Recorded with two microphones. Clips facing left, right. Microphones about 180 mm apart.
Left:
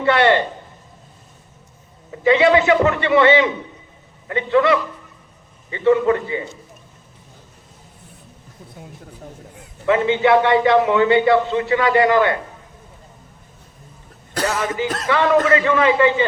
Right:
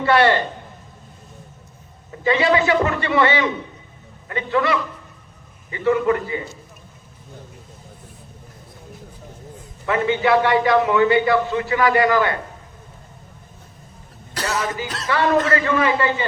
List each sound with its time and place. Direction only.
0.0 s a sound: 20° left (ahead or behind)
2.2 s a man's voice: 20° left (ahead or behind)
9.8 s a man's voice: 25° left (ahead or behind)
14.8 s speech: 50° left (ahead or behind)
15.1 s a man's voice: 20° left (ahead or behind)